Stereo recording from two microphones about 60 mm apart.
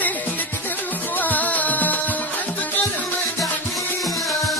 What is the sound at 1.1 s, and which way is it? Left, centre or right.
Music, left.